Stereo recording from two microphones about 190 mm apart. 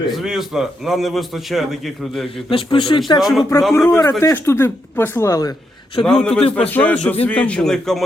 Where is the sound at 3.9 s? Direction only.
15° left (ahead or behind).